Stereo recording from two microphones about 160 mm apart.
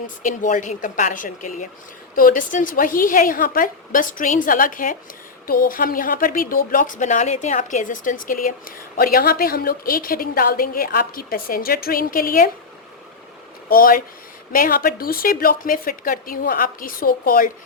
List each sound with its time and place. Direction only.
0.2 s a woman's voice: 50° left (ahead or behind)
13.7 s a woman's voice: 65° left (ahead or behind)